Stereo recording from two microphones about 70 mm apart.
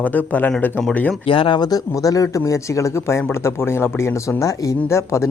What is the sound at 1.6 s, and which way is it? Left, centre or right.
Speech, left.